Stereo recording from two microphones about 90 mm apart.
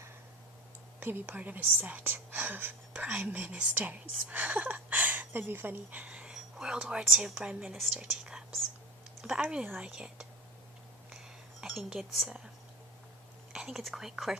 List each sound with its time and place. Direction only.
0.9 s speech: 20° right (ahead or behind)
11.6 s speech: 5° right (ahead or behind)
13.5 s speech: 5° right (ahead or behind)